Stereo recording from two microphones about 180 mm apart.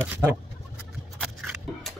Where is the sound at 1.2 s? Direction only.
Centre (ahead or behind).